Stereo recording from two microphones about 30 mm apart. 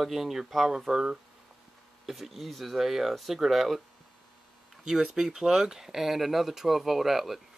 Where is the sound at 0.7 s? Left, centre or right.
Centre.